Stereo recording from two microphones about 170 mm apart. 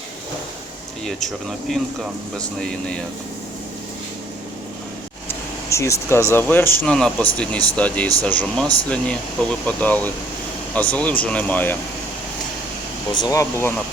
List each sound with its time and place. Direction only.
1.0 s speech: centre (ahead or behind)
5.7 s speech: 15° left (ahead or behind)
13.2 s speech: 20° left (ahead or behind)